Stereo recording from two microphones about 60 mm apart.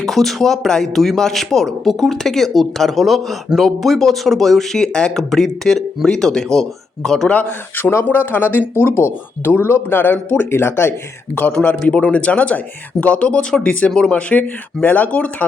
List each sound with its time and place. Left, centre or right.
0.0 s speech: centre
7.8 s speech: left
10.5 s speech: left
11.3 s a man's voice: left